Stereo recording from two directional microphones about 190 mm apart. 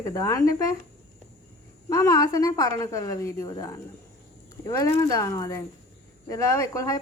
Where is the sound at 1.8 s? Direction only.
15° left (ahead or behind).